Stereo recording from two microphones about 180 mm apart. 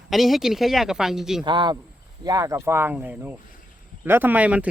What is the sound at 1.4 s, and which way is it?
Speech, 25° right (ahead or behind).